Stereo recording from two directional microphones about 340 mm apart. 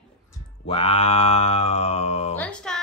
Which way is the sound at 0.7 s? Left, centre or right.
Centre.